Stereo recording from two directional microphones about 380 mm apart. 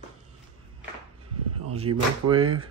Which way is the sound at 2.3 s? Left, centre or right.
Right.